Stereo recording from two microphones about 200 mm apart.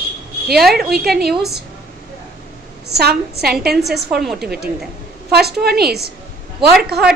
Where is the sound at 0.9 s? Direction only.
50° right (ahead or behind).